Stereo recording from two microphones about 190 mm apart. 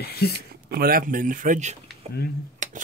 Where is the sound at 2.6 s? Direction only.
40° right (ahead or behind).